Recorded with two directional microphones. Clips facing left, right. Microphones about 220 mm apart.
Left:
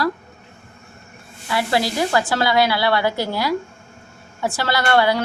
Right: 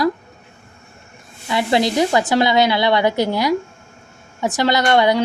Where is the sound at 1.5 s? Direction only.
20° right (ahead or behind).